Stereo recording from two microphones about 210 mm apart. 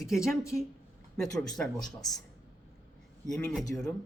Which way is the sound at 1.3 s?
15° left (ahead or behind).